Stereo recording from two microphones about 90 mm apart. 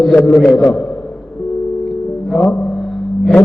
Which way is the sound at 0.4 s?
5° left (ahead or behind).